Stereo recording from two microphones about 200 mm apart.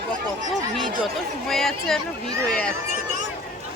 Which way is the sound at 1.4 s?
Centre (ahead or behind).